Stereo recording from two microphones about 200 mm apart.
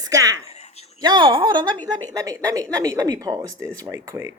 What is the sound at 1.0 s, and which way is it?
Speech, 20° right (ahead or behind).